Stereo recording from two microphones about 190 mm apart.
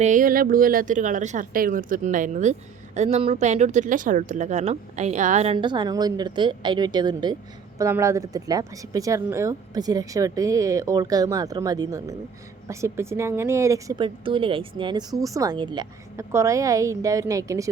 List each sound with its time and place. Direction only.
0.0 s a woman's voice: 45° right (ahead or behind); by 17.7 s 15° right (ahead or behind)